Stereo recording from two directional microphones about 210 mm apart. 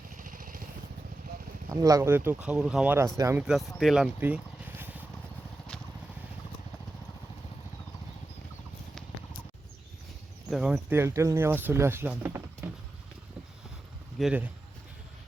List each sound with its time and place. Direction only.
0.2 s vehicle: 40° right (ahead or behind)
1.7 s speech: 15° right (ahead or behind)
3.8 s a sound: centre (ahead or behind)
10.5 s speech: 5° right (ahead or behind)
12.6 s vehicle: 10° right (ahead or behind)
14.2 s speech: 5° right (ahead or behind)